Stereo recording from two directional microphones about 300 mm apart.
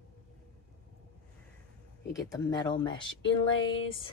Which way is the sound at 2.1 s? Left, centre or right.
Centre.